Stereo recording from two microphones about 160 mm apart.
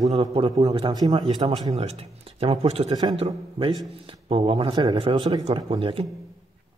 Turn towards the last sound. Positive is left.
turn(degrees=-35)  # may be behind; listen again after turning